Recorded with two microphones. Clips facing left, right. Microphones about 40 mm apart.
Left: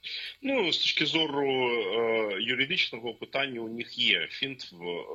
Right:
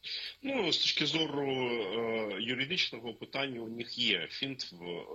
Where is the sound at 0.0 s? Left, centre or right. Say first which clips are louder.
Left 5 dB; left.